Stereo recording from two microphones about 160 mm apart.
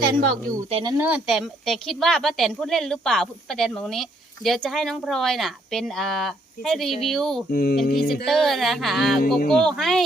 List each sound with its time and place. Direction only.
0.2 s speech: 65° right (ahead or behind)
0.7 s speech: 30° right (ahead or behind)
0.9 s speech: 10° right (ahead or behind)
7.5 s speech: 80° left
8.1 s speech: centre (ahead or behind)